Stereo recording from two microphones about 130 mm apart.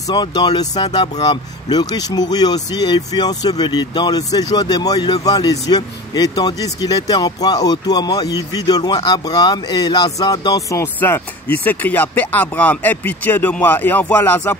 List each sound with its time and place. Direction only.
0.1 s speech: 35° left (ahead or behind)
11.5 s speech: 15° left (ahead or behind)